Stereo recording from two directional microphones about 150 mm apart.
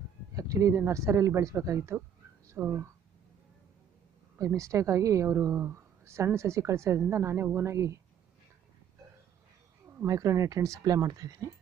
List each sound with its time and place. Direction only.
0.3 s speech: 20° right (ahead or behind)
4.4 s a woman's voice: 20° right (ahead or behind)
9.9 s a woman's voice: 20° right (ahead or behind)